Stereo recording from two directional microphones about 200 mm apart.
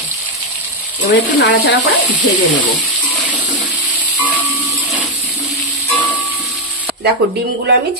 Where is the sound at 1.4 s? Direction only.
65° left (ahead or behind).